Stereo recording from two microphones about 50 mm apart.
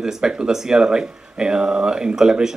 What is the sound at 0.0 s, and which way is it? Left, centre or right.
Speech, centre.